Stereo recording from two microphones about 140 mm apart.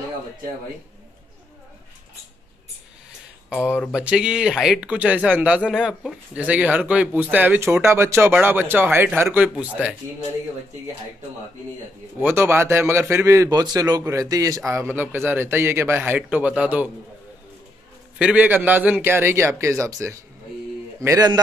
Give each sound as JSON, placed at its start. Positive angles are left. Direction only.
{"t": 3.4, "sound": "speech", "side_deg": -5}
{"t": 12.2, "sound": "a man's voice", "side_deg": -15}
{"t": 18.2, "sound": "a man's voice", "side_deg": -10}